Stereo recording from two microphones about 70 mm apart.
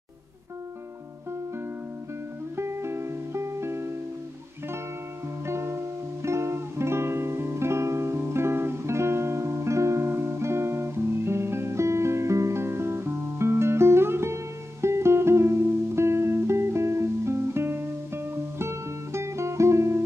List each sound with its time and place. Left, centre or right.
2.5 s music: right
5.5 s music: right